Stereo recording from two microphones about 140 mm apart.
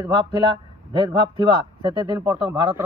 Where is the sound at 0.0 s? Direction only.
35° right (ahead or behind).